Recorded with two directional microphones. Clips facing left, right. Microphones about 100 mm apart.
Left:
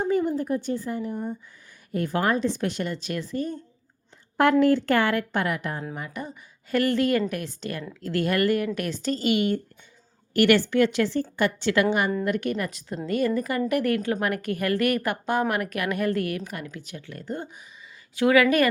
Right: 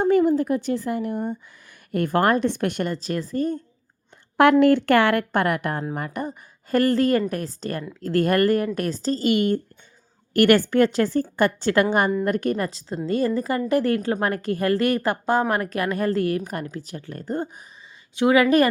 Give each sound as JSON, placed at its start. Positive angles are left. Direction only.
{"t": 0.0, "sound": "speech", "side_deg": -85}
{"t": 1.9, "sound": "a woman's voice", "side_deg": -60}
{"t": 4.6, "sound": "a woman's voice", "side_deg": -70}
{"t": 18.1, "sound": "speech", "side_deg": -25}